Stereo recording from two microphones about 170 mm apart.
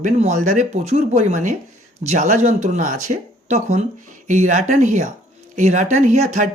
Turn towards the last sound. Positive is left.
turn(degrees=-45)  # may be behind; listen again after turning